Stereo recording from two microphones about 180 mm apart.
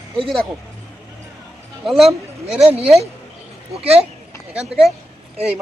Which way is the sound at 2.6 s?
35° right (ahead or behind).